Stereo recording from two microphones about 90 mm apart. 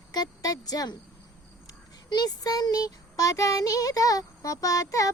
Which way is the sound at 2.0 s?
50° left (ahead or behind).